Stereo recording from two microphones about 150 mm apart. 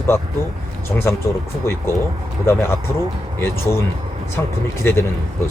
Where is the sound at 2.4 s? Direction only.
15° left (ahead or behind).